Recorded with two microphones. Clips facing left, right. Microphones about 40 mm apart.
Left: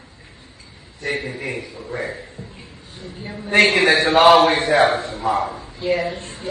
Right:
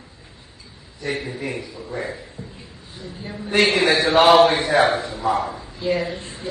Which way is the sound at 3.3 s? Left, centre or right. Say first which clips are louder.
Left 1 dB; centre.